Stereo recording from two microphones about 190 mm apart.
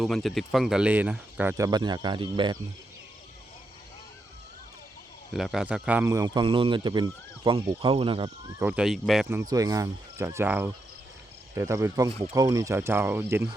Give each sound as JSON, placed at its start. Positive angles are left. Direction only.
{"t": 0.0, "sound": "speech", "side_deg": 0}
{"t": 5.3, "sound": "a man's voice", "side_deg": 0}
{"t": 6.1, "sound": "speech", "side_deg": -20}
{"t": 8.4, "sound": "speech", "side_deg": -15}
{"t": 8.7, "sound": "a man's voice", "side_deg": 0}
{"t": 9.3, "sound": "speech", "side_deg": -20}